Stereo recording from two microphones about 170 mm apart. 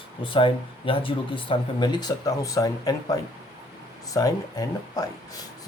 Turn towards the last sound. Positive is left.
turn(degrees=20)  # may be behind; listen again after turning